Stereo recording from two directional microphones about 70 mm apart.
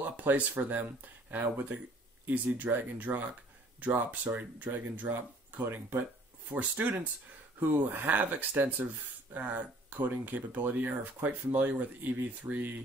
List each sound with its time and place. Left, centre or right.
0.0 s speech: right